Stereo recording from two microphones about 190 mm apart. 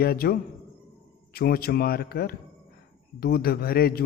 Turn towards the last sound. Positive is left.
turn(degrees=55)  # may be behind; listen again after turning